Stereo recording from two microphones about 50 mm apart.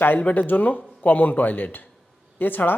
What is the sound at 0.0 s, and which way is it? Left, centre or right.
Speech, left.